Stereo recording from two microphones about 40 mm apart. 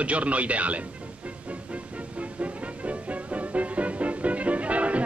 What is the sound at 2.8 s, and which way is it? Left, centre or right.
Music, right.